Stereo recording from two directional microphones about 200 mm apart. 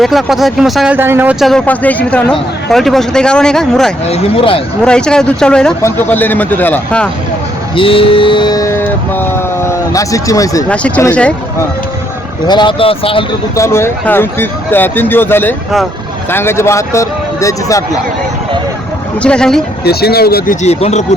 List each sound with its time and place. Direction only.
0.0 s speech: centre (ahead or behind)
4.0 s speech: 30° left (ahead or behind)
4.9 s speech: 5° left (ahead or behind)
7.8 s mantra: 25° left (ahead or behind)
10.7 s speech: 5° left (ahead or behind)
12.5 s speech: 25° left (ahead or behind)
13.6 s speech: 15° left (ahead or behind)
19.2 s speech: 5° left (ahead or behind)
19.8 s speech: 50° left (ahead or behind)
20.6 s speech: 35° left (ahead or behind)